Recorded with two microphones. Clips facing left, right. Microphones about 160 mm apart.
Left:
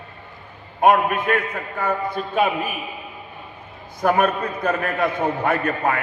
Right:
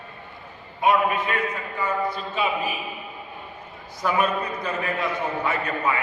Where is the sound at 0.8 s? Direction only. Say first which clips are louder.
Left 4 dB; 55° left (ahead or behind).